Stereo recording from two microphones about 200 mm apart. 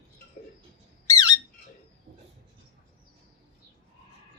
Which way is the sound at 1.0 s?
20° left (ahead or behind).